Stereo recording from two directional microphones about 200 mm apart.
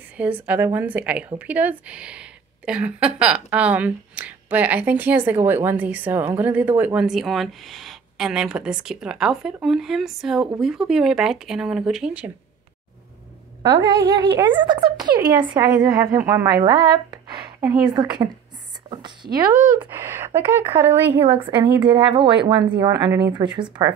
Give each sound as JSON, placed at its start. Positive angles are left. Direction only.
{"t": 0.2, "sound": "a woman's voice", "side_deg": -10}
{"t": 13.6, "sound": "a woman's voice", "side_deg": -15}
{"t": 19.8, "sound": "a woman's voice", "side_deg": -10}
{"t": 21.2, "sound": "speech", "side_deg": -25}